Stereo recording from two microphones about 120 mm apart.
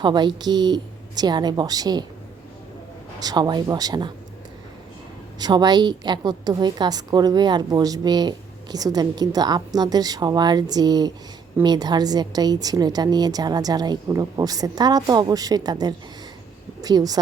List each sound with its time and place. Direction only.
0.0 s a woman's voice: 40° right (ahead or behind)
3.2 s a woman's voice: 35° right (ahead or behind)
5.4 s a woman's voice: 35° right (ahead or behind)